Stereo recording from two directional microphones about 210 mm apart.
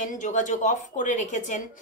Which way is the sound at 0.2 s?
35° left (ahead or behind).